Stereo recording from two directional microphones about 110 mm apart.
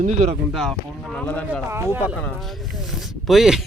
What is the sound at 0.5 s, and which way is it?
Speech, centre (ahead or behind).